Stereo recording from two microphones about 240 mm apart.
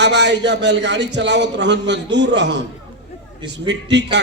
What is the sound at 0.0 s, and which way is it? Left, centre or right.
A man's voice, right.